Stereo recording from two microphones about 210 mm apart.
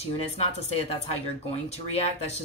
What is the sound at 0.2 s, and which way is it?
Speech, 30° left (ahead or behind).